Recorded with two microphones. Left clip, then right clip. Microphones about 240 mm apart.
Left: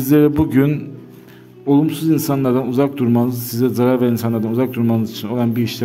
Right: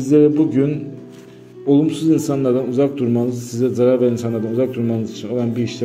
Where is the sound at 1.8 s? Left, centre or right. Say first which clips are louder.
Right 1 dB; left.